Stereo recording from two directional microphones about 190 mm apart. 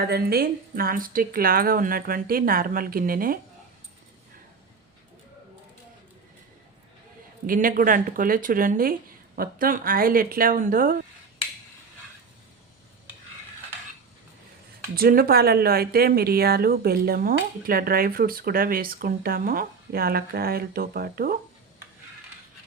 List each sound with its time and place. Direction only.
0.0 s speech: 55° right (ahead or behind)
7.4 s speech: 50° right (ahead or behind)
14.9 s speech: 50° right (ahead or behind)